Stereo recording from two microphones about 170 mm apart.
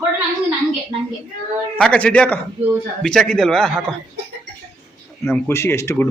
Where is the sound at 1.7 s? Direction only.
5° left (ahead or behind).